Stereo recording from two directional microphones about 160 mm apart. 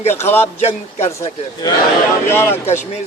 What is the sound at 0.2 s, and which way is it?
Speech, 15° left (ahead or behind).